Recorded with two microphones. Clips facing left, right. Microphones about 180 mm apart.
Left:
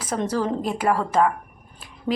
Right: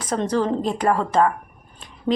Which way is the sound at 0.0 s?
10° left (ahead or behind).